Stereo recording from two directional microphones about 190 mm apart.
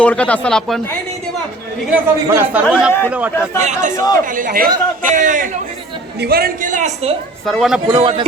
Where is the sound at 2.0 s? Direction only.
10° right (ahead or behind).